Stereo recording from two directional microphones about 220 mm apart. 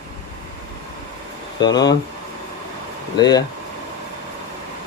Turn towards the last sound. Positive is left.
turn(degrees=20)  # may be behind; listen again after turning